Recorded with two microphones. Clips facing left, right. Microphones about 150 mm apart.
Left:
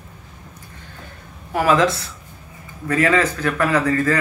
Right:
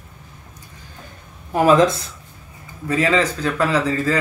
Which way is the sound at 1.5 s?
25° right (ahead or behind).